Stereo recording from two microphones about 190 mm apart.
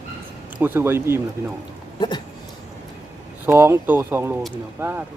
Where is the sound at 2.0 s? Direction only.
25° left (ahead or behind).